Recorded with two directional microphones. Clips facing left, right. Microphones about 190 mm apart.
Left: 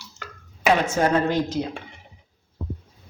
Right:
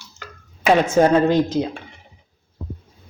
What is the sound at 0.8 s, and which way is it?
Speech, 20° right (ahead or behind).